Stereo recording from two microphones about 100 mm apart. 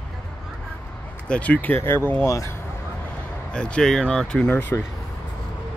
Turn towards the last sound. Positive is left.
turn(degrees=20)  # may be behind; listen again after turning